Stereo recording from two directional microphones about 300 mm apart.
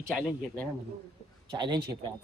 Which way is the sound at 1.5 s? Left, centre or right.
Centre.